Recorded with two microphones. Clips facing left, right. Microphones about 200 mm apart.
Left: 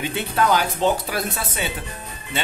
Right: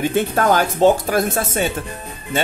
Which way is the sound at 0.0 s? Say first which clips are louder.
Right 5 dB; 45° right (ahead or behind).